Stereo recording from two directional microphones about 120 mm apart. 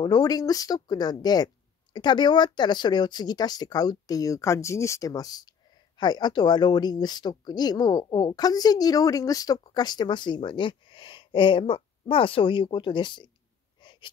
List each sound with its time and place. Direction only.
0.0 s speech: 35° left (ahead or behind)